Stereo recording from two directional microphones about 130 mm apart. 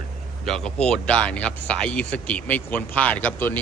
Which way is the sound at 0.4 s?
5° left (ahead or behind).